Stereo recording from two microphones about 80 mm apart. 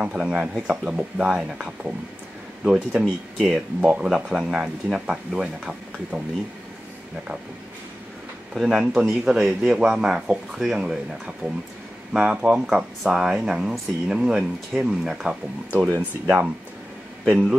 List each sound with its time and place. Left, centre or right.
0.0 s speech: centre
3.8 s speech: right
4.1 s speech: centre
8.5 s speech: centre
17.3 s speech: centre